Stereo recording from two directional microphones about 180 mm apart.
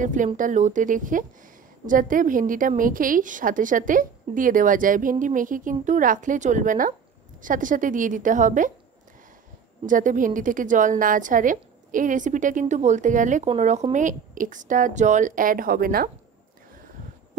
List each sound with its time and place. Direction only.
0.0 s a woman's voice: 45° right (ahead or behind)
9.8 s a woman's voice: 45° right (ahead or behind)